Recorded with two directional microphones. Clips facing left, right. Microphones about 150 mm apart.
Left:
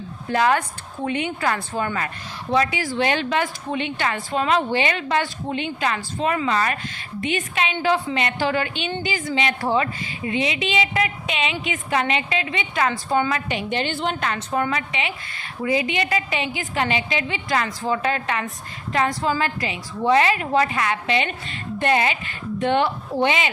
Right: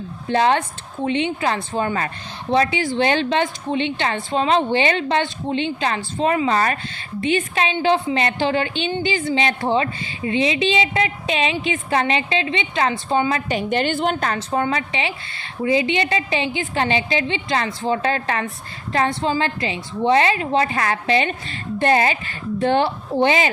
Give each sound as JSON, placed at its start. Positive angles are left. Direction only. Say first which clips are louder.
{"t": 0.3, "sound": "a woman's voice", "louder": "right 2 dB", "side_deg": -25}
{"t": 13.5, "sound": "a woman's voice", "louder": "right 4 dB", "side_deg": -45}